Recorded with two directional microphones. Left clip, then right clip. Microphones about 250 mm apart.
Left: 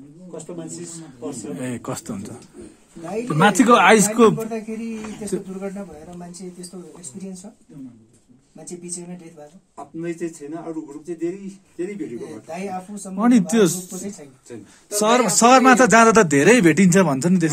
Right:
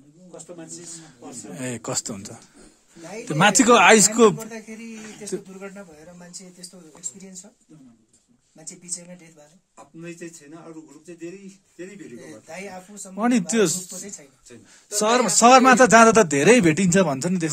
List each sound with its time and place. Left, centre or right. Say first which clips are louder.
0.9 s a man's voice: left 8 dB; right
12.4 s speech: left 5 dB; centre
12.7 s a man's voice: left 5 dB; right